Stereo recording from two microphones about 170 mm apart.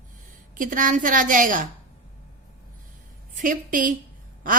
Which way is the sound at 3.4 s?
50° right (ahead or behind).